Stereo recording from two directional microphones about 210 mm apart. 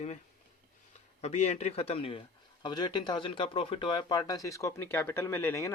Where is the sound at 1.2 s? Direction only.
30° left (ahead or behind).